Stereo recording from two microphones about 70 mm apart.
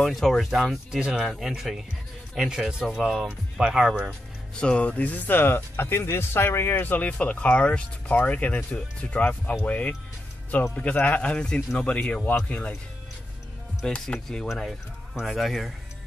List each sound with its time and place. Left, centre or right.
0.0 s speech: centre
4.6 s speech: centre
13.8 s speech: centre
14.5 s speech: centre